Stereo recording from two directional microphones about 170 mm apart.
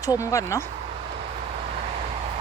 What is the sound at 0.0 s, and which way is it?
Speech, 20° left (ahead or behind).